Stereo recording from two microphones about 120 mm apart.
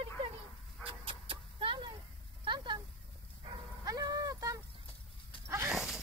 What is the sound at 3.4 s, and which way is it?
Dog, 30° right (ahead or behind).